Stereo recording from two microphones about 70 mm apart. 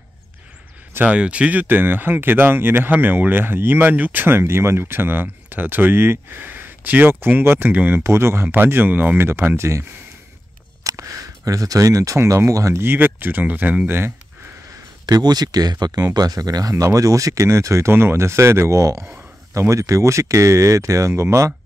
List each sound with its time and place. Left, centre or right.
1.0 s speech: centre
8.0 s speech: right
9.6 s speech: right
12.8 s speech: right
15.0 s speech: right